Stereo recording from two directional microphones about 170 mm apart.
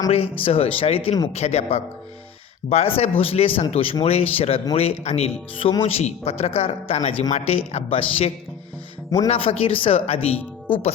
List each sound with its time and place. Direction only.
0.1 s speech: 35° left (ahead or behind)